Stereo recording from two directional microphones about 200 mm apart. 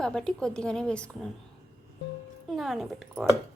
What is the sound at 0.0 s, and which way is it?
Speech, 5° left (ahead or behind).